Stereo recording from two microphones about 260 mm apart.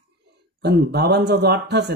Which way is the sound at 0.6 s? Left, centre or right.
Right.